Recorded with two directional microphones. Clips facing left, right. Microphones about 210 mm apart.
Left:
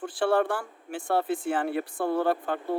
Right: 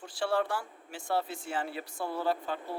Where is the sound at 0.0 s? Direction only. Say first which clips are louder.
Left 6 dB; 55° left (ahead or behind).